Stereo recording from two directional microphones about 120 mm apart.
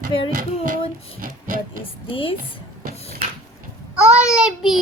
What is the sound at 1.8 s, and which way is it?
Music, 50° left (ahead or behind).